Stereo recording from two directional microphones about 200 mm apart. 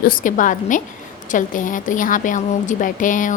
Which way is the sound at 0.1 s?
40° left (ahead or behind).